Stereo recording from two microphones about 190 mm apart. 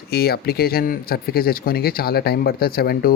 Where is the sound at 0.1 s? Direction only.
55° left (ahead or behind).